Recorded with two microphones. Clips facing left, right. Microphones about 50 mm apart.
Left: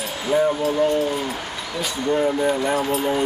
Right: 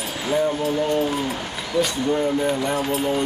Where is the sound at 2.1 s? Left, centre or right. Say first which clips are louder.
Left 4 dB; centre.